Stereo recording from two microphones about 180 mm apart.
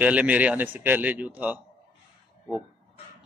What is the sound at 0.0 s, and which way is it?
Speech, 10° right (ahead or behind).